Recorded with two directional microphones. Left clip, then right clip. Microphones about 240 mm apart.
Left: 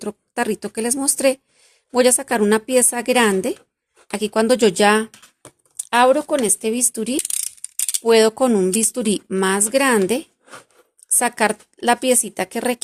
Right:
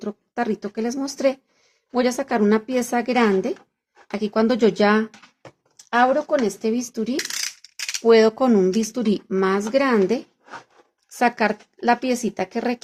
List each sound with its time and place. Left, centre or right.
0.0 s speech: left